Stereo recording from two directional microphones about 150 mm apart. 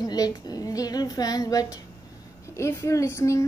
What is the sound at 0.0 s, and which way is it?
A woman's voice, 25° left (ahead or behind).